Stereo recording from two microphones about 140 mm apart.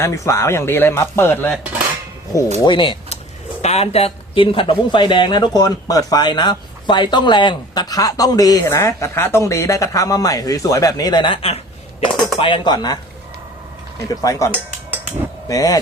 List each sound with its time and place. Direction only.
0.0 s a man's voice: 20° left (ahead or behind)
2.6 s speech: 35° left (ahead or behind)
3.6 s a man's voice: 50° left (ahead or behind); by 13.0 s 30° left (ahead or behind)
14.2 s a man's voice: 25° left (ahead or behind)
14.5 s dishes: 15° right (ahead or behind)
15.4 s a man's voice: 25° left (ahead or behind)